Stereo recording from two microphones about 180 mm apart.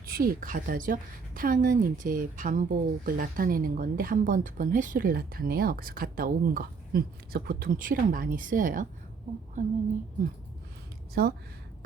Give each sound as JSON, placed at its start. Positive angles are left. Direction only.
{"t": 0.0, "sound": "a woman's voice", "side_deg": -55}
{"t": 11.1, "sound": "a woman's voice", "side_deg": -60}